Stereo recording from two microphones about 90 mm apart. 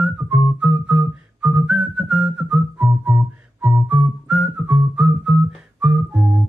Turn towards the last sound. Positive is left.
turn(degrees=-10)  # may be behind; listen again after turning